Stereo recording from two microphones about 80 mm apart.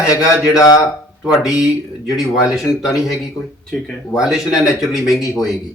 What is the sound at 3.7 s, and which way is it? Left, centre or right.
Speech, centre.